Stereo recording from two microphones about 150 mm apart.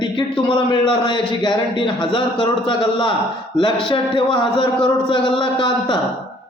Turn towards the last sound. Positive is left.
turn(degrees=30)  # may be behind; listen again after turning